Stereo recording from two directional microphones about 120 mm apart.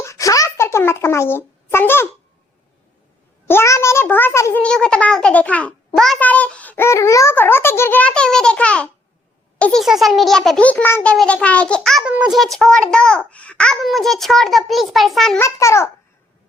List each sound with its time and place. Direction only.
0.0 s a sound: 25° left (ahead or behind)
3.4 s a child's voice: 20° left (ahead or behind)
4.6 s a child's voice: 5° left (ahead or behind)
9.8 s a child's voice: centre (ahead or behind)
10.7 s a child's voice: 15° left (ahead or behind)
12.0 s a child's voice: 10° right (ahead or behind)
15.4 s a child's voice: 25° left (ahead or behind)